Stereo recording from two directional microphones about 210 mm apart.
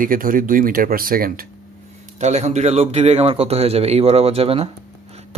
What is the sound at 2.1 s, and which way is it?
A man's voice, 30° right (ahead or behind).